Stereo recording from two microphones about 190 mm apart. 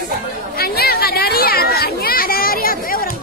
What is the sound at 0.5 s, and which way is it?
Children playing, 55° left (ahead or behind).